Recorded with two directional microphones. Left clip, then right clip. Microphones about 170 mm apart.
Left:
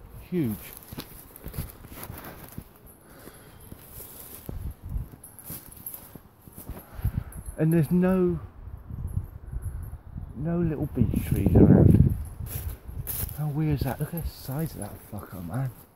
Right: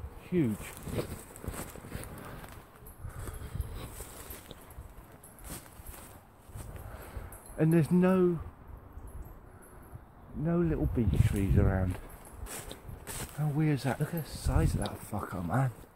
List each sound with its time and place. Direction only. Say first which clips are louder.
0.3 s speech: left 1 dB; 15° left (ahead or behind)
7.5 s speech: left 2 dB; 10° left (ahead or behind)
10.4 s speech: left 1 dB; centre (ahead or behind)
12.4 s a sound: right 2 dB; 55° left (ahead or behind)
13.4 s speech: left 2 dB; centre (ahead or behind)
15.1 s speech: right 4 dB; 20° right (ahead or behind)